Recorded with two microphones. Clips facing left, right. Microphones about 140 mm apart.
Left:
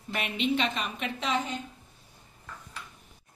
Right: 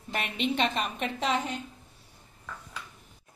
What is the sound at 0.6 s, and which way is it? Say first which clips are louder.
Speech: right 2 dB; 50° right (ahead or behind).